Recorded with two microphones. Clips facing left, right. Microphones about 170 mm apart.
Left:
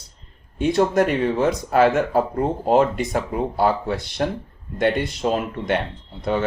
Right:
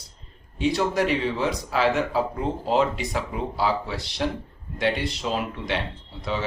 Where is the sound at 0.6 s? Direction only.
50° left (ahead or behind).